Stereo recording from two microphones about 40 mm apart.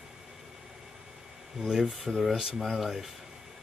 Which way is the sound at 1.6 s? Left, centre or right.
Centre.